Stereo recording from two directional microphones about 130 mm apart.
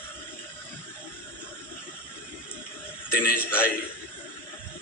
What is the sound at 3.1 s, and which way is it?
Speech, 15° left (ahead or behind).